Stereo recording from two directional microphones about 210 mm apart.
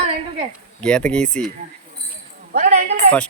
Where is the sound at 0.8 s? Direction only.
5° left (ahead or behind).